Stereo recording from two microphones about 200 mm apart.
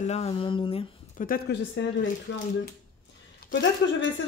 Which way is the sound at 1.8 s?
65° left (ahead or behind).